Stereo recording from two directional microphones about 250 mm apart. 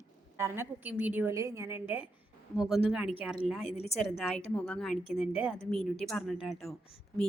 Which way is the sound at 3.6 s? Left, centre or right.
Left.